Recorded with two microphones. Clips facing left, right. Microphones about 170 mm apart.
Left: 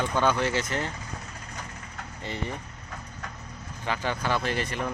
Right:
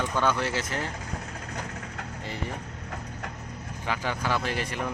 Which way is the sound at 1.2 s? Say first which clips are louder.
Right 4 dB; 65° right (ahead or behind).